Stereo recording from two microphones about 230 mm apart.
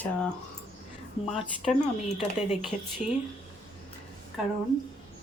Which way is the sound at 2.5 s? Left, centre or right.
Centre.